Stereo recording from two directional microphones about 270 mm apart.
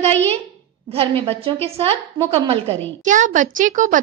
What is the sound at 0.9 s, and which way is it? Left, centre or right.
A woman's voice, right.